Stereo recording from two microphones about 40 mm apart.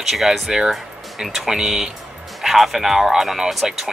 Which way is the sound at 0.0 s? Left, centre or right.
Centre.